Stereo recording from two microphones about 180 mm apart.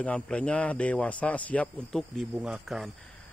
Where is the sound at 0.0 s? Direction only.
5° left (ahead or behind).